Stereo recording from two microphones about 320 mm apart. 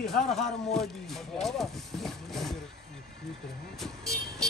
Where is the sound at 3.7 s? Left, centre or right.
Centre.